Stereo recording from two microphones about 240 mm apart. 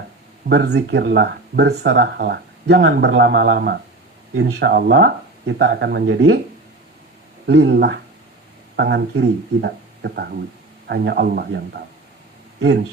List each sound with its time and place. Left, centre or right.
0.4 s speech: right
7.4 s speech: right